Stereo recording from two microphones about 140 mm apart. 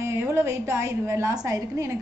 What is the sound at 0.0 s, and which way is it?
A woman's voice, 20° right (ahead or behind).